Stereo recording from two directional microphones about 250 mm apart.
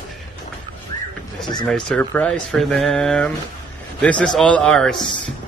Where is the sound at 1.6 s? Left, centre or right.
Centre.